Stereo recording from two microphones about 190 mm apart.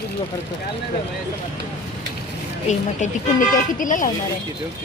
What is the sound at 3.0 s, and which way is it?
Speech, 45° left (ahead or behind).